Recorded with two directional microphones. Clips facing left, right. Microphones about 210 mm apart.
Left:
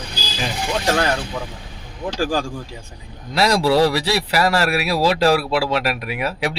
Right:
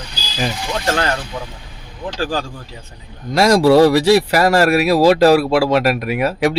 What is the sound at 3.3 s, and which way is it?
Speech, 45° right (ahead or behind).